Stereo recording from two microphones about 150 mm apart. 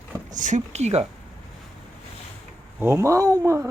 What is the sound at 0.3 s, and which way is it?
Speech, 55° right (ahead or behind).